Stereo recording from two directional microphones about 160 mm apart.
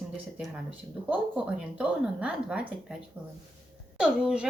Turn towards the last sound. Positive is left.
turn(degrees=-5)  # may be behind; listen again after turning